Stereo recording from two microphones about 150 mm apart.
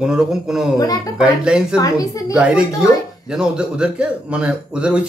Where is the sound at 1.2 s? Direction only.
5° right (ahead or behind).